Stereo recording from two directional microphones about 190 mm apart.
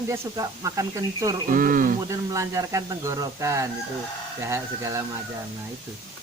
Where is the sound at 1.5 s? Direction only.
45° right (ahead or behind).